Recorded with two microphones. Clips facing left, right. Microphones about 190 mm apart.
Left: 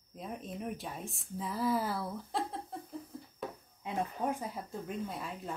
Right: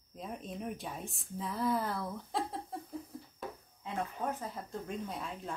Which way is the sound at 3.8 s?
15° left (ahead or behind).